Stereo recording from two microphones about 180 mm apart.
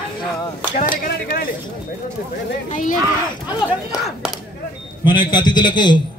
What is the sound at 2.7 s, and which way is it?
Speech, 45° left (ahead or behind).